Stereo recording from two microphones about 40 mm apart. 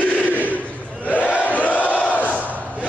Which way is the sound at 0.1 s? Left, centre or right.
Left.